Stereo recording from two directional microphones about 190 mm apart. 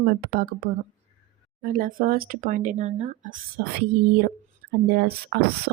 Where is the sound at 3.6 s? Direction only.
50° right (ahead or behind).